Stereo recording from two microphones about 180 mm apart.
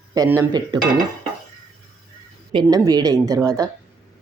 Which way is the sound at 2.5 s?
25° right (ahead or behind).